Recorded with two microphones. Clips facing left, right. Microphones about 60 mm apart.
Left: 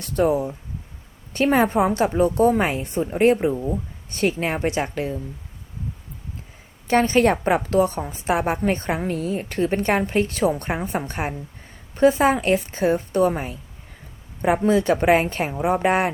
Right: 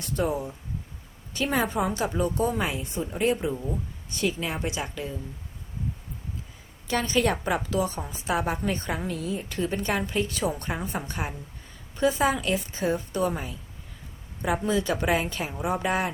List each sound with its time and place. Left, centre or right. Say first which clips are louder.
0.0 s a woman's voice: left 7 dB; left
6.8 s a woman's voice: left 7 dB; left